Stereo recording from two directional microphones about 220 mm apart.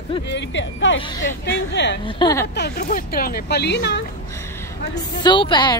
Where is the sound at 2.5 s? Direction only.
45° left (ahead or behind).